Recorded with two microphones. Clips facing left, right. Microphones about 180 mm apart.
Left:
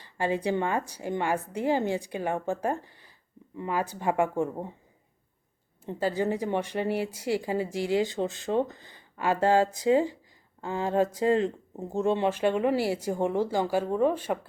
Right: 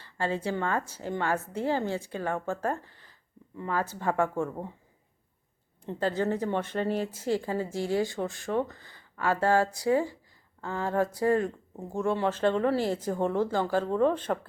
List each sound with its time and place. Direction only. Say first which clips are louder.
0.0 s speech: left 3 dB; 15° left (ahead or behind)
5.8 s speech: left 1 dB; 10° left (ahead or behind)